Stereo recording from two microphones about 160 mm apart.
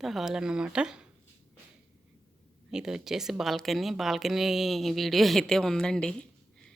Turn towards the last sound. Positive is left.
turn(degrees=5)  # may be behind; listen again after turning